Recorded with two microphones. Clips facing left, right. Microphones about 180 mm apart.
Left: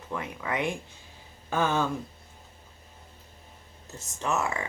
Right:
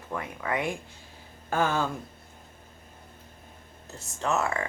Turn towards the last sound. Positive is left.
turn(degrees=15)  # may be behind; listen again after turning